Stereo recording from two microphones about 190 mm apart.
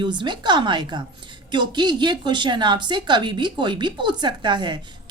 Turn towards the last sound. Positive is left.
turn(degrees=-25)  # may be behind; listen again after turning